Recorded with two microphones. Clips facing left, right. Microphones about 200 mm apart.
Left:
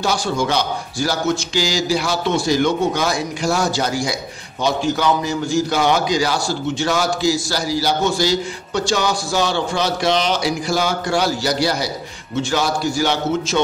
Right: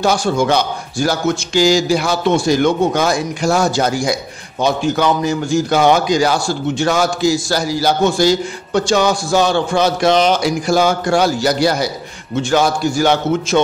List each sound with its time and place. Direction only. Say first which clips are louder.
0.0 s a man's voice: right 5 dB; 50° right (ahead or behind)